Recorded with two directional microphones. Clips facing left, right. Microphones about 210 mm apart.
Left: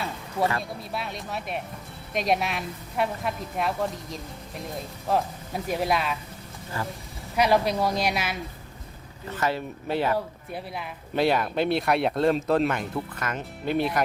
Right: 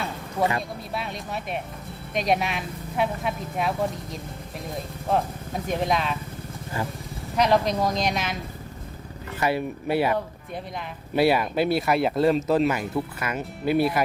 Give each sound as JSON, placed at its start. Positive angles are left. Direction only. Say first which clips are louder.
{"t": 0.8, "sound": "speech", "louder": "right 1 dB", "side_deg": 0}
{"t": 6.8, "sound": "speech", "louder": "right 2 dB", "side_deg": -15}
{"t": 7.3, "sound": "speech", "louder": "right 1 dB", "side_deg": 10}
{"t": 9.4, "sound": "speech", "louder": "right 3 dB", "side_deg": -10}